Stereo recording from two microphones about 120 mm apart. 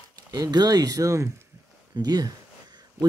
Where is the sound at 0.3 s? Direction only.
35° right (ahead or behind).